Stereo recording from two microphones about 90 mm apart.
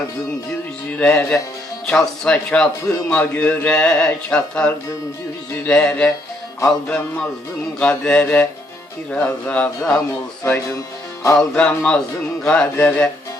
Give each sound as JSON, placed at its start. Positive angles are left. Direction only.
{"t": 0.9, "sound": "speech", "side_deg": 15}
{"t": 10.7, "sound": "music", "side_deg": 40}
{"t": 11.3, "sound": "speech", "side_deg": 10}
{"t": 12.7, "sound": "music", "side_deg": 20}